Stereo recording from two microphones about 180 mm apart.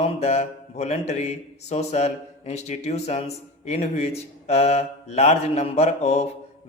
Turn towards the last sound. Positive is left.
turn(degrees=35)  # may be behind; listen again after turning